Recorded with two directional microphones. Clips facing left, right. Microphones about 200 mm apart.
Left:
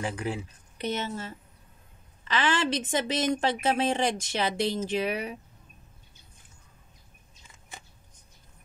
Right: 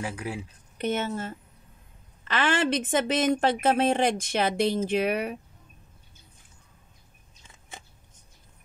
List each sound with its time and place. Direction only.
0.0 s speech: 5° right (ahead or behind)
0.7 s a woman's voice: 50° right (ahead or behind)